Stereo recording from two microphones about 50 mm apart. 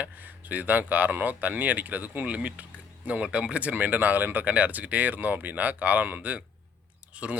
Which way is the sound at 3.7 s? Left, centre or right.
Right.